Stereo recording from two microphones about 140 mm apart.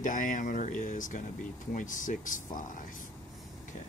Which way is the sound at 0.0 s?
70° left (ahead or behind).